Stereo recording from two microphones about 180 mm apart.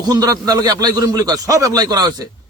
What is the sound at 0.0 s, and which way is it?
A man's voice, 20° right (ahead or behind).